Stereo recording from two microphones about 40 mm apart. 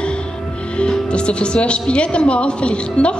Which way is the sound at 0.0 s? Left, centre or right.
Left.